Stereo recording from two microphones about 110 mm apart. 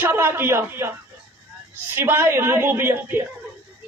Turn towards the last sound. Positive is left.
turn(degrees=-20)  # may be behind; listen again after turning